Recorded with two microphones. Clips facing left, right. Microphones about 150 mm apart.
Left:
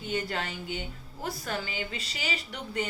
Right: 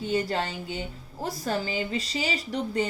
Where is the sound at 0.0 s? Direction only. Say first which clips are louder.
Right 5 dB; 35° right (ahead or behind).